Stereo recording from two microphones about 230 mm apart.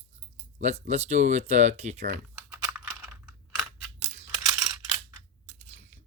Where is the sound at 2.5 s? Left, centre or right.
Centre.